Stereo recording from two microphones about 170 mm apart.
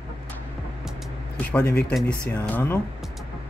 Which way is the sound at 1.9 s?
5° left (ahead or behind).